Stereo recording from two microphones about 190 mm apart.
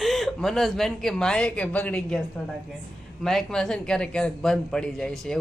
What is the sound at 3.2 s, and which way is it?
Speech, 5° left (ahead or behind).